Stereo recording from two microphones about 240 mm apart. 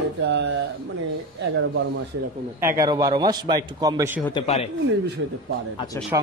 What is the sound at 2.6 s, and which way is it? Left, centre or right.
A man's voice, centre.